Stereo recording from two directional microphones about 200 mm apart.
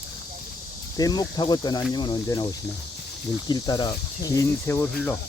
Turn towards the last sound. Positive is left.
turn(degrees=10)  # may be behind; listen again after turning